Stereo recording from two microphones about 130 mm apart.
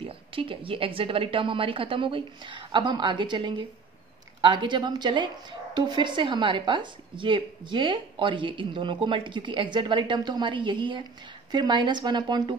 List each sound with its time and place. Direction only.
0.0 s a woman's voice: 45° right (ahead or behind)